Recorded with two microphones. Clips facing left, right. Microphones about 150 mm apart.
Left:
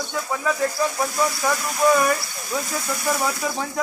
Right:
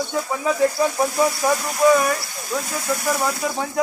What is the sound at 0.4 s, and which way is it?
Speech, 20° right (ahead or behind).